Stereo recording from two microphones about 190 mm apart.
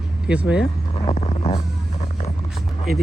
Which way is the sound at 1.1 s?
35° left (ahead or behind).